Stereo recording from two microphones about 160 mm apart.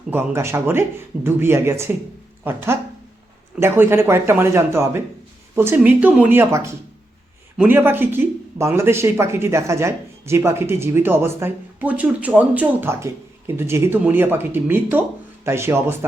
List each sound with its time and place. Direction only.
0.1 s speech: 15° right (ahead or behind)